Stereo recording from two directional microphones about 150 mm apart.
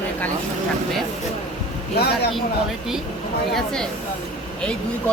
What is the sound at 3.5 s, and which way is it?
Speech, 5° left (ahead or behind).